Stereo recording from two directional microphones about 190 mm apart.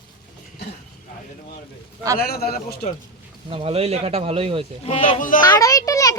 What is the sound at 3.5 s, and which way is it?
Speech, 30° right (ahead or behind).